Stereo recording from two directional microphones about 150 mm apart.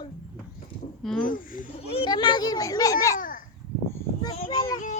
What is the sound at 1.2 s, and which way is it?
Speech, 65° left (ahead or behind).